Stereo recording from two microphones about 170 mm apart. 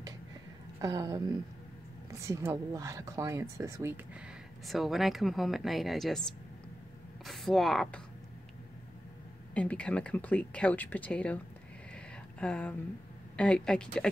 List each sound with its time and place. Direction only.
0.7 s a woman's voice: 20° right (ahead or behind)
4.6 s speech: centre (ahead or behind)
9.5 s speech: 5° left (ahead or behind)
11.9 s a sound: 5° left (ahead or behind)
13.4 s speech: 5° left (ahead or behind)